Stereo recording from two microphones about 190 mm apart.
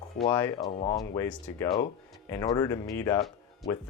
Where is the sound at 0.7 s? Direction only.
30° left (ahead or behind).